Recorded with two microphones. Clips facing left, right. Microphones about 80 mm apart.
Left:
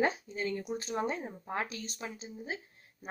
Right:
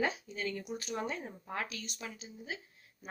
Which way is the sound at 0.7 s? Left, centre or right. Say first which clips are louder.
Left 4 dB; left.